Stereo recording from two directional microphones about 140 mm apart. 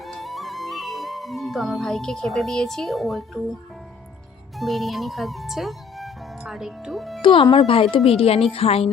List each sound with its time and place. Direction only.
0.0 s music: centre (ahead or behind)
4.5 s speech: centre (ahead or behind)
7.2 s a woman's voice: 35° left (ahead or behind)